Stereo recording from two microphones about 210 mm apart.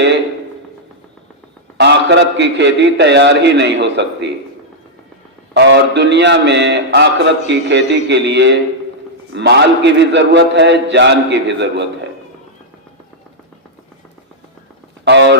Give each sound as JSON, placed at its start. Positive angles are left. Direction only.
{"t": 1.8, "sound": "a man's voice", "side_deg": -55}
{"t": 5.5, "sound": "a man's voice", "side_deg": -55}
{"t": 15.0, "sound": "a man's voice", "side_deg": -55}